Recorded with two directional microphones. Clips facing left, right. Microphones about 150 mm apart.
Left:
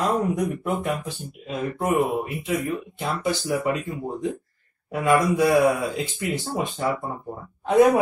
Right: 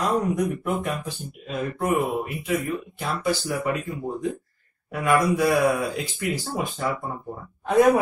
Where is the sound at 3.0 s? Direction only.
25° left (ahead or behind).